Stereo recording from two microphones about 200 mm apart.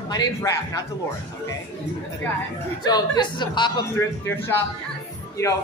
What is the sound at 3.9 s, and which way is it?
Speech, 15° left (ahead or behind).